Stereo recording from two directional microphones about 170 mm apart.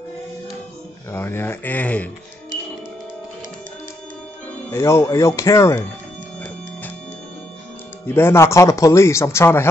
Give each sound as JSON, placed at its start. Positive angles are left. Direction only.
{"t": 1.1, "sound": "speech", "side_deg": 15}
{"t": 4.6, "sound": "speech", "side_deg": 15}
{"t": 8.1, "sound": "speech", "side_deg": 15}